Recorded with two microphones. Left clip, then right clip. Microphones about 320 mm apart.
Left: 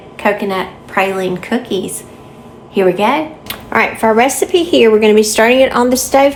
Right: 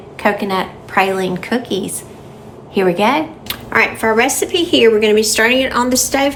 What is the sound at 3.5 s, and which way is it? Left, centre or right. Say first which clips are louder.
Speech: left 1 dB; centre.